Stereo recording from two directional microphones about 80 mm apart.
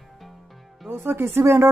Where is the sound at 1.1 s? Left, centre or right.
Right.